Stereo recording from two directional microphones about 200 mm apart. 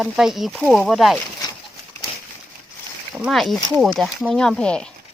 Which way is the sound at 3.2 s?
Centre (ahead or behind).